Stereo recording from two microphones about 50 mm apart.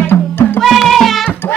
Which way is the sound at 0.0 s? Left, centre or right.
Left.